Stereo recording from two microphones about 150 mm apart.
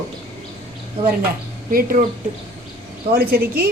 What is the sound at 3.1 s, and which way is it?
Speech, 75° right (ahead or behind).